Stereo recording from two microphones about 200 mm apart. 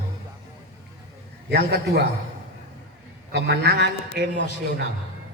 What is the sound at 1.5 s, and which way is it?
Speech, 50° right (ahead or behind).